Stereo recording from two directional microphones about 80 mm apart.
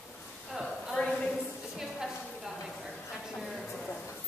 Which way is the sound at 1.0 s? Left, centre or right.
Centre.